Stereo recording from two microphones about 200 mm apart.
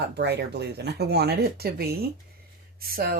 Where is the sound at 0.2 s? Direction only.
55° right (ahead or behind).